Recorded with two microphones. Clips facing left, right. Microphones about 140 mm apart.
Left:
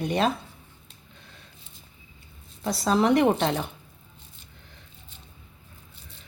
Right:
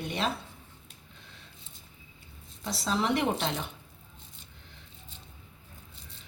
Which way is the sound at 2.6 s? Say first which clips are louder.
Left 7 dB; 50° left (ahead or behind).